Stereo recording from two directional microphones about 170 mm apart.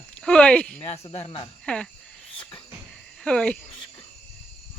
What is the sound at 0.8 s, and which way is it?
Speech, 35° left (ahead or behind).